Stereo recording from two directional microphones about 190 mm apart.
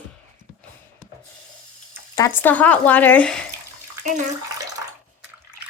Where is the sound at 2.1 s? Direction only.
15° left (ahead or behind).